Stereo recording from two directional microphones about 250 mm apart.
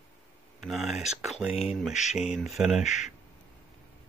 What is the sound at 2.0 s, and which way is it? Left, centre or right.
Speech, left.